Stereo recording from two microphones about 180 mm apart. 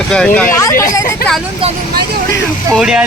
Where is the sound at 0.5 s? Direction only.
15° left (ahead or behind).